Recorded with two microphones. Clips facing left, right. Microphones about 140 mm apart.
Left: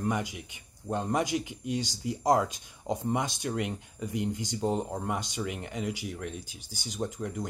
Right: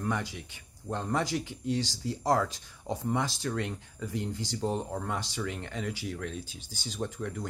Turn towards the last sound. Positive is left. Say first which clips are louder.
# left 1 dB
turn(degrees=15)  # may be behind; listen again after turning